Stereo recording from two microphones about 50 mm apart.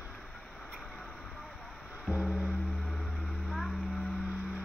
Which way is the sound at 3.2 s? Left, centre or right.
Centre.